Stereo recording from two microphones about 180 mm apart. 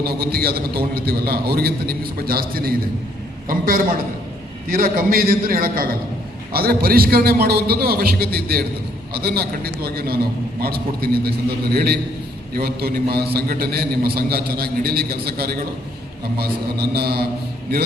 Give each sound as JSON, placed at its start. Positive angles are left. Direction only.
{"t": 0.0, "sound": "a man's voice", "side_deg": -60}